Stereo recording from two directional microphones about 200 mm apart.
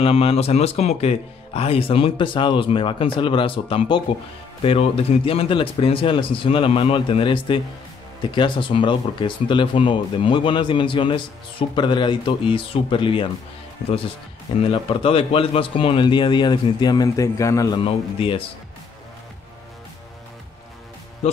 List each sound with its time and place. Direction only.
0.0 s speech: 30° left (ahead or behind)
14.6 s speech: 25° left (ahead or behind)